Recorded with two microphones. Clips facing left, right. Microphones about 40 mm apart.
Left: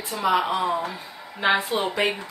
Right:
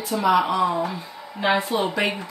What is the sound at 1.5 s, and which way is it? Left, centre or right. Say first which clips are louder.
Speech: right 2 dB; left.